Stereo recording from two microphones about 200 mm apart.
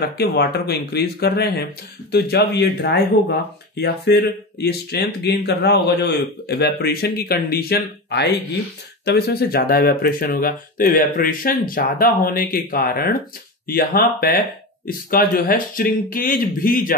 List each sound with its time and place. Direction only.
0.2 s speech: 55° left (ahead or behind)